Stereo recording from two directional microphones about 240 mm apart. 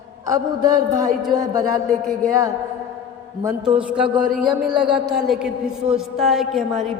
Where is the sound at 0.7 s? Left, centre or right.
Centre.